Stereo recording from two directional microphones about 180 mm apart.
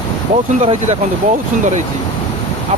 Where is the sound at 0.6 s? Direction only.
40° right (ahead or behind).